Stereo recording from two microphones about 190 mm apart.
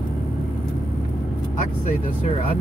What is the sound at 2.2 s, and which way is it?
Speech, 35° left (ahead or behind).